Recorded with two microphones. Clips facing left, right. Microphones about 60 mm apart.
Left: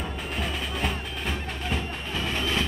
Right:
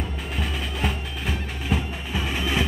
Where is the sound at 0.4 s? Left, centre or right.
Centre.